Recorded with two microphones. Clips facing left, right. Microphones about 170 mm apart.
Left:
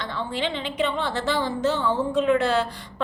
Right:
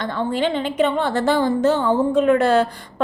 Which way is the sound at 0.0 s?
50° right (ahead or behind).